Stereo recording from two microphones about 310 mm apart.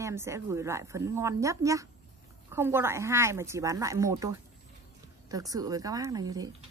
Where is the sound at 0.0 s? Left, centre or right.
Centre.